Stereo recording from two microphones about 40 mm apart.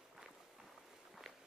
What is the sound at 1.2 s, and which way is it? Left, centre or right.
Walk, centre.